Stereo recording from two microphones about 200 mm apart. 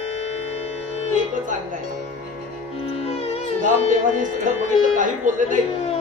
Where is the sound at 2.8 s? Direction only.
30° left (ahead or behind).